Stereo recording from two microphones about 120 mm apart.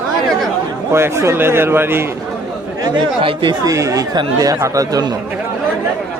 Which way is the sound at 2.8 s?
45° right (ahead or behind).